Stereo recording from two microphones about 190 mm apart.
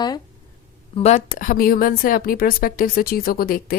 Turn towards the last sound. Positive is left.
turn(degrees=50)  # may be behind; listen again after turning